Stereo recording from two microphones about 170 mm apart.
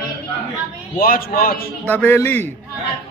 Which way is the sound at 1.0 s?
60° left (ahead or behind).